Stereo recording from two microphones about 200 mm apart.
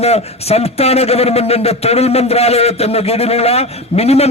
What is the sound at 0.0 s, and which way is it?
A man's voice, 30° left (ahead or behind).